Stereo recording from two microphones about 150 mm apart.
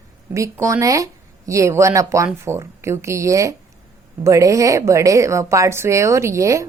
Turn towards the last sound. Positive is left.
turn(degrees=-20)  # may be behind; listen again after turning